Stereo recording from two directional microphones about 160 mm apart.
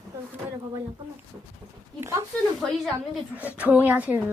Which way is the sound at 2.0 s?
15° right (ahead or behind).